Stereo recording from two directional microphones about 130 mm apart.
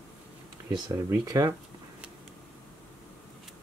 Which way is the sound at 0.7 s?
30° right (ahead or behind).